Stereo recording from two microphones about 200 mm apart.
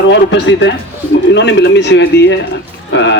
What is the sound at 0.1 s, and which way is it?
Speech, 65° left (ahead or behind).